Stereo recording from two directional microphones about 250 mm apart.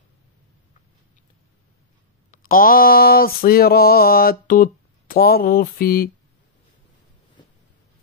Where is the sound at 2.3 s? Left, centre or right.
Left.